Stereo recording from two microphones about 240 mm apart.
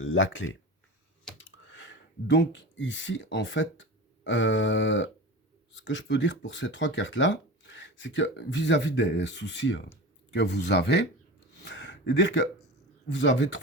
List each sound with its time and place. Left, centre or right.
0.0 s speech: left
11.6 s a sound: left
13.1 s speech: left